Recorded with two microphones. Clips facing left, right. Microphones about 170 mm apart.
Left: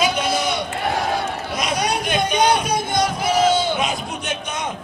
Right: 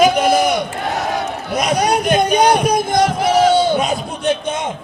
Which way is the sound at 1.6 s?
45° right (ahead or behind).